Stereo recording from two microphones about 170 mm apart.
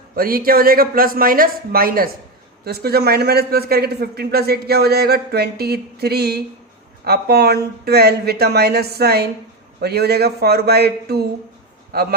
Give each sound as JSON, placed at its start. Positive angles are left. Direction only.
{"t": 0.2, "sound": "a man's voice", "side_deg": -60}